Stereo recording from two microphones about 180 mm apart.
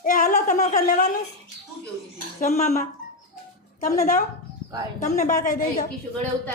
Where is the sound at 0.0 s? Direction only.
50° left (ahead or behind).